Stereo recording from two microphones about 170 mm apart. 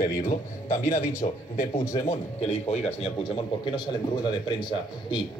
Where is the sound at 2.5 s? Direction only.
40° left (ahead or behind).